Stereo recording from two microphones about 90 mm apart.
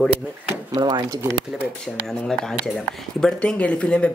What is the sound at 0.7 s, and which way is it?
Speech, 50° right (ahead or behind).